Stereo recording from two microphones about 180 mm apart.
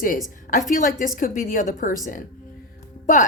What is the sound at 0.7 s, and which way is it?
A woman's voice, 45° left (ahead or behind).